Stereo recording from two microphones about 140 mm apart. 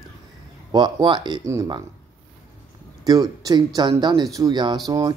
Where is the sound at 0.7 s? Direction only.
30° right (ahead or behind).